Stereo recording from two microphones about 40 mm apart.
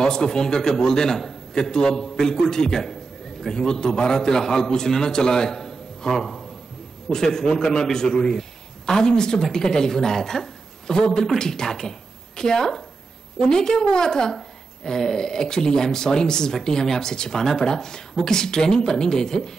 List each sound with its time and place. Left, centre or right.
0.0 s a man's voice: centre
14.9 s a sound: centre
15.1 s a man's voice: centre